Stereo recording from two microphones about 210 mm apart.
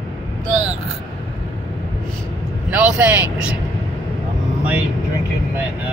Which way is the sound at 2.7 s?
5° right (ahead or behind).